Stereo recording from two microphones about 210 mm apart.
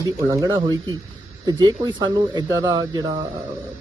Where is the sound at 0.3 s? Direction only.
15° right (ahead or behind).